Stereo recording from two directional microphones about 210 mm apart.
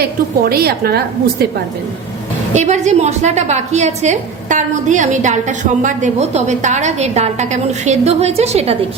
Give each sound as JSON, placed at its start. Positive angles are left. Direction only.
{"t": 0.0, "sound": "a woman's voice", "side_deg": -45}
{"t": 2.5, "sound": "a woman's voice", "side_deg": -35}